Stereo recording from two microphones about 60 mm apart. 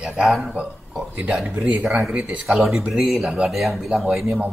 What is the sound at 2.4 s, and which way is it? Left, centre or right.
Speech, centre.